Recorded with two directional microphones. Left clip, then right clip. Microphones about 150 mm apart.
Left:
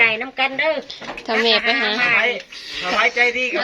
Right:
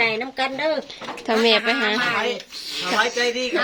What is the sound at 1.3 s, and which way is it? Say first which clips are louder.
Speech: left 1 dB; 25° right (ahead or behind).